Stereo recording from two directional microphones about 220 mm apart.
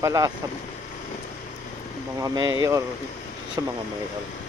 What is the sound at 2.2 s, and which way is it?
Speech, 15° right (ahead or behind).